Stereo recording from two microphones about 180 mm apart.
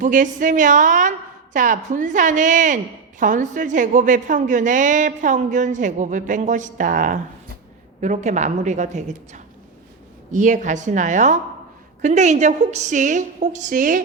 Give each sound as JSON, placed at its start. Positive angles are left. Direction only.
{"t": 0.0, "sound": "a woman's voice", "side_deg": -45}